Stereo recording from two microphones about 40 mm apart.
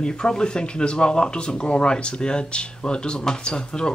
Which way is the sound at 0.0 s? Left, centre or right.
Left.